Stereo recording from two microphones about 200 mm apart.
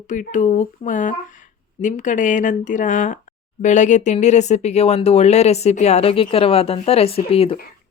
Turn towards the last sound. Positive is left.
turn(degrees=30)  # may be behind; listen again after turning